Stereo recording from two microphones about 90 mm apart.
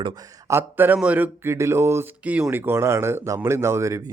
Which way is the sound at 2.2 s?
15° right (ahead or behind).